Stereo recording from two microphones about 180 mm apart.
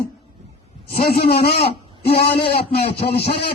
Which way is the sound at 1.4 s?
35° left (ahead or behind).